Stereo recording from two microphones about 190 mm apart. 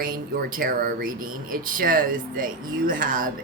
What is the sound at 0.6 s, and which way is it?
Speech, 45° right (ahead or behind).